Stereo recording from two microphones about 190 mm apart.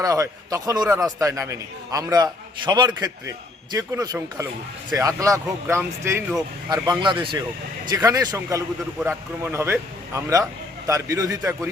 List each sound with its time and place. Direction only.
0.0 s a man's voice: 15° right (ahead or behind)
7.0 s a man's voice: 25° right (ahead or behind)